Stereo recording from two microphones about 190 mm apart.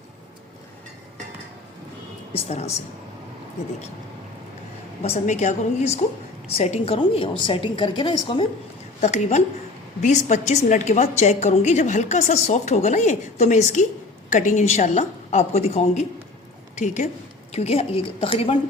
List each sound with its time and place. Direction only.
2.3 s a woman's voice: 35° left (ahead or behind)
5.0 s a woman's voice: 35° left (ahead or behind)
9.0 s a woman's voice: 35° left (ahead or behind)